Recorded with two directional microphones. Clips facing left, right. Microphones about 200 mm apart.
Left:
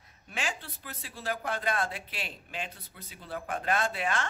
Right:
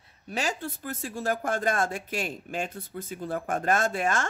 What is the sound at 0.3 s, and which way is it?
Speech, 40° right (ahead or behind).